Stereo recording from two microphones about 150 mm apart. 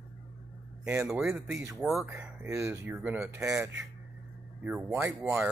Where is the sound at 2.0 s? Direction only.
15° right (ahead or behind).